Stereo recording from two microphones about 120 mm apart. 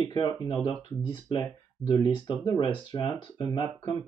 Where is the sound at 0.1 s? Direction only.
45° left (ahead or behind).